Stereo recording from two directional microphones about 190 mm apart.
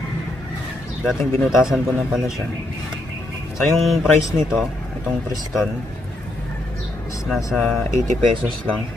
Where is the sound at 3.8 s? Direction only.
Centre (ahead or behind).